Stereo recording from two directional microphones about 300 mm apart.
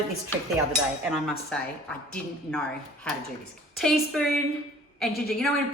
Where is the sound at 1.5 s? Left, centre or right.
Centre.